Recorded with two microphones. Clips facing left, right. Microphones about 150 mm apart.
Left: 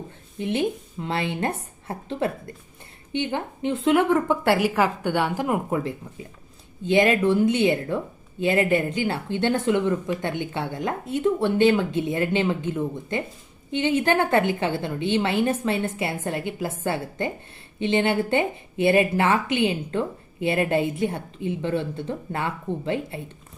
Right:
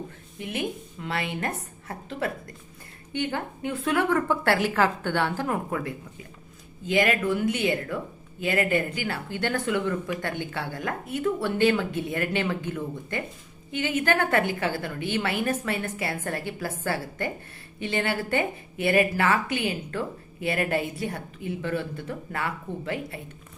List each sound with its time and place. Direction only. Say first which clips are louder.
0.3 s speech: left 6 dB; 30° left (ahead or behind)